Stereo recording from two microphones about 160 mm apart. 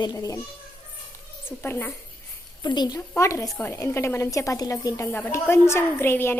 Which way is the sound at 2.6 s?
25° left (ahead or behind).